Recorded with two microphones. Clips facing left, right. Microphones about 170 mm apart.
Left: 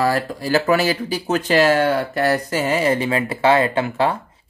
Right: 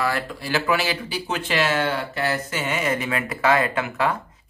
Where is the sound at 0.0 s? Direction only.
40° left (ahead or behind).